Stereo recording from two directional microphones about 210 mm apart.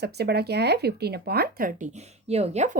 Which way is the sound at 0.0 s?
50° right (ahead or behind).